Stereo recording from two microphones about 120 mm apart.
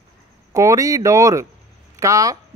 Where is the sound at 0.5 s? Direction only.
25° right (ahead or behind).